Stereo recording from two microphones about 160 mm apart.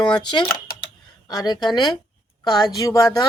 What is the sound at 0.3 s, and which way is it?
Speech, 25° left (ahead or behind).